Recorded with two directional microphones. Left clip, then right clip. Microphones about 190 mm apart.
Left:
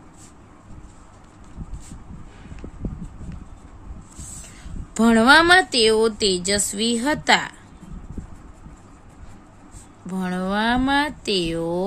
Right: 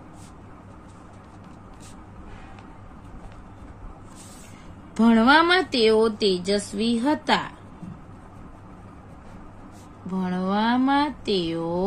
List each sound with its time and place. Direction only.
4.9 s speech: 35° left (ahead or behind)
10.0 s a woman's voice: 40° left (ahead or behind)